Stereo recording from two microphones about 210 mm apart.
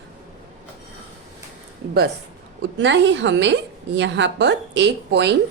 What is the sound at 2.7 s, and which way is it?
A woman's voice, 60° right (ahead or behind).